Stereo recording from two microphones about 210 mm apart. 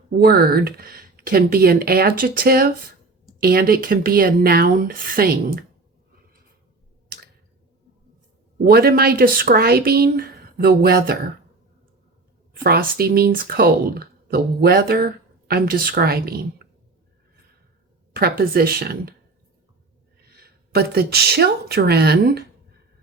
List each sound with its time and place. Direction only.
0.1 s speech: 45° right (ahead or behind)
8.6 s speech: 45° right (ahead or behind)
12.6 s speech: 45° right (ahead or behind)
18.1 s speech: 45° right (ahead or behind)
20.3 s a woman's voice: 50° right (ahead or behind)